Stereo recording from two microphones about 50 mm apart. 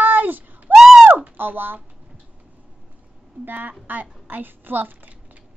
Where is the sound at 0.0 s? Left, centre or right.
Right.